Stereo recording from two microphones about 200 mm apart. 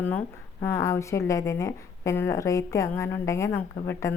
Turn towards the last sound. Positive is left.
turn(degrees=10)  # may be behind; listen again after turning